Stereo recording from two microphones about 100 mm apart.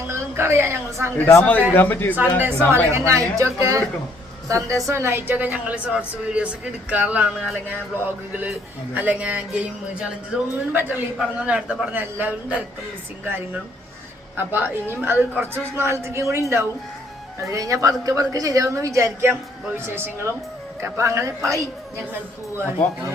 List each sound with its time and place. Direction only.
0.1 s speech: 25° right (ahead or behind)
1.2 s speech: 20° left (ahead or behind)
2.4 s a woman's voice: 25° right (ahead or behind)